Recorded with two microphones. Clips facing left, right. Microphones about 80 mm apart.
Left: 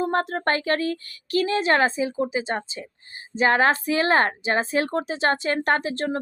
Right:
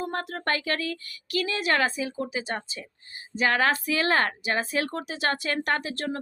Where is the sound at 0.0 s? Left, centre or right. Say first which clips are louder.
Left 7 dB; left.